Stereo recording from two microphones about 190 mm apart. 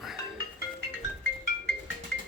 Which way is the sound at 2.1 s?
65° left (ahead or behind).